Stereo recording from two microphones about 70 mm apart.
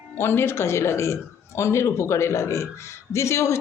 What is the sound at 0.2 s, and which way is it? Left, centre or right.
A woman's voice, left.